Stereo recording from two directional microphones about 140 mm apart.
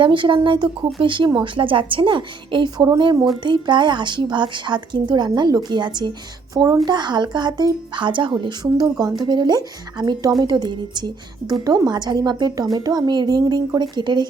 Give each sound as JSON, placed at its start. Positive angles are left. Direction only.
{"t": 0.0, "sound": "a woman's voice", "side_deg": -35}